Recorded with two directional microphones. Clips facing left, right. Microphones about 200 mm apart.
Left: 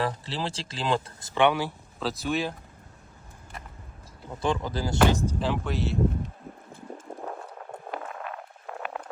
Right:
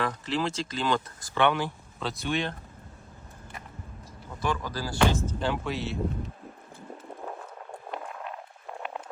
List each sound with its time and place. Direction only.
0.0 s speech: 30° left (ahead or behind)
1.4 s speech: 10° left (ahead or behind)
4.3 s speech: 30° left (ahead or behind)
5.1 s speech: 10° left (ahead or behind)
5.5 s speech: centre (ahead or behind)
7.9 s a sound: centre (ahead or behind)